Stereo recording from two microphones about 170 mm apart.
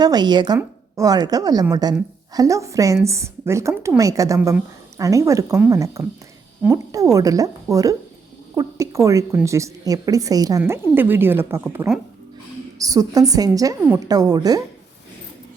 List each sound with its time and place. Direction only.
0.0 s a woman's voice: 25° right (ahead or behind)
4.4 s speech: 10° right (ahead or behind)
4.9 s a woman's voice: 20° right (ahead or behind)
12.8 s a woman's voice: 20° right (ahead or behind)